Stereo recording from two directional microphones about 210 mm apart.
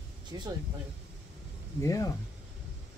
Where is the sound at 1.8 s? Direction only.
15° left (ahead or behind).